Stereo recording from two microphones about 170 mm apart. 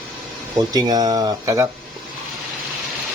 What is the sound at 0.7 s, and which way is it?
Speech, 20° right (ahead or behind).